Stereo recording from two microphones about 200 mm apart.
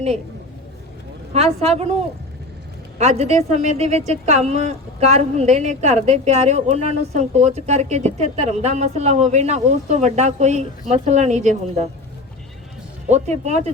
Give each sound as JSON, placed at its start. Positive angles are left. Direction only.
{"t": 1.3, "sound": "speech", "side_deg": -30}
{"t": 3.0, "sound": "speech", "side_deg": -35}
{"t": 13.1, "sound": "speech", "side_deg": -35}